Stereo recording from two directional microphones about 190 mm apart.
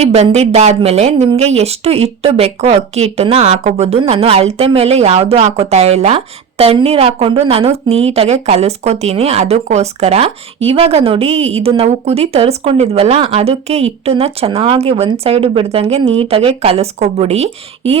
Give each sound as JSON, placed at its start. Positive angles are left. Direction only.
{"t": 0.0, "sound": "a woman's voice", "side_deg": -35}